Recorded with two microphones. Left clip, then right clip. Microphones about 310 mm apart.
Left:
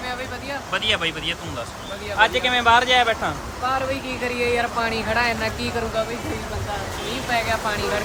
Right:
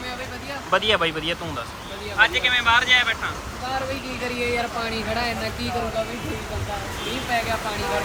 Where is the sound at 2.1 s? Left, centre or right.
Centre.